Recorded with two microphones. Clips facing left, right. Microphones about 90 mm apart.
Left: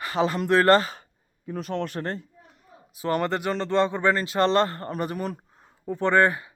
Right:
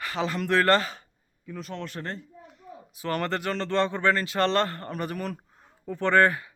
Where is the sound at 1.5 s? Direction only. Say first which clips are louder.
Left 6 dB; 60° left (ahead or behind).